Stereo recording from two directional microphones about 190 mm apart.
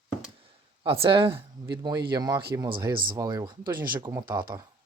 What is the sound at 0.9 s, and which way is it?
Speech, 30° right (ahead or behind).